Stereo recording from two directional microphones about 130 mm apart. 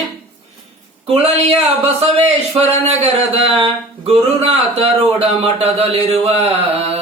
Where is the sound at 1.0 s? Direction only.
50° right (ahead or behind).